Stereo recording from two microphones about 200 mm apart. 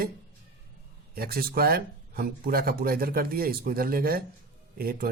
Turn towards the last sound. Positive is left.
turn(degrees=-50)  # may be behind; listen again after turning